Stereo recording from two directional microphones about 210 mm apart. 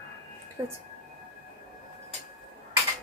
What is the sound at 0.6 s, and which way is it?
Speech, 15° right (ahead or behind).